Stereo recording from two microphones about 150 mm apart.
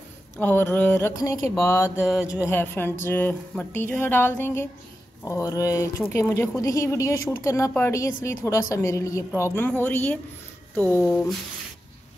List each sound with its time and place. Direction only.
0.4 s a woman's voice: 15° left (ahead or behind)